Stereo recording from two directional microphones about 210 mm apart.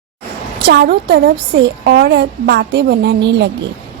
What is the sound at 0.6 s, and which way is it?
A woman's voice, 45° right (ahead or behind).